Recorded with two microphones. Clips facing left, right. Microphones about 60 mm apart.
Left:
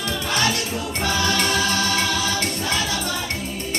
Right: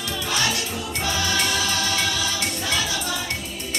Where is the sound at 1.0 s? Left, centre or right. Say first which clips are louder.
Left 3 dB; left.